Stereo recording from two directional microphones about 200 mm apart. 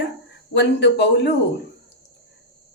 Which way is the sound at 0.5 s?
60° left (ahead or behind).